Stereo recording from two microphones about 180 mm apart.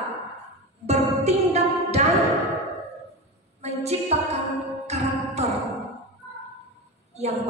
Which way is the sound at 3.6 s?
35° right (ahead or behind).